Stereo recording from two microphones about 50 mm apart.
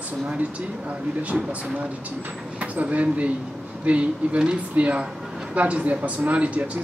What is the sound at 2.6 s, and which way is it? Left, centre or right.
Speech, right.